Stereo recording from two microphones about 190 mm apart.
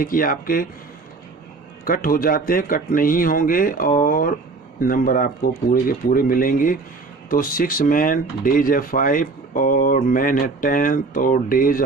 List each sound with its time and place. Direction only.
0.0 s speech: 50° left (ahead or behind)
1.8 s speech: 50° left (ahead or behind)